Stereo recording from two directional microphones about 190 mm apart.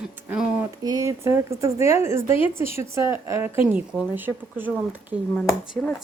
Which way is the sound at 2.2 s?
30° left (ahead or behind).